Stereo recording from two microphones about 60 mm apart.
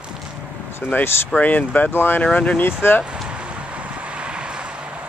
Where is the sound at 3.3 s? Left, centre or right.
Centre.